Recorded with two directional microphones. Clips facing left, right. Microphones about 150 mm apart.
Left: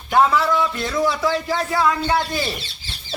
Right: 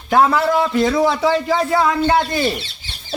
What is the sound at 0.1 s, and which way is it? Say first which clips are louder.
Speech: right 2 dB; 55° right (ahead or behind).